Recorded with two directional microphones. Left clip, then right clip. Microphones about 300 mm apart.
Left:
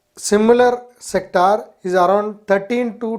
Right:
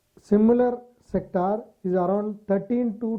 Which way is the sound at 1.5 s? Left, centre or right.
Centre.